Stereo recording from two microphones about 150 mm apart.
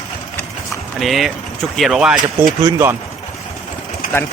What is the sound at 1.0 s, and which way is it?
Speech, centre (ahead or behind).